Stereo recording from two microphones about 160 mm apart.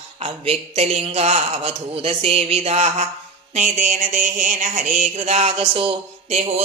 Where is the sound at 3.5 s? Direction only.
50° right (ahead or behind).